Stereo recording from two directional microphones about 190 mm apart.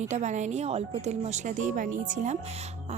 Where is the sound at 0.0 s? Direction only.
40° right (ahead or behind).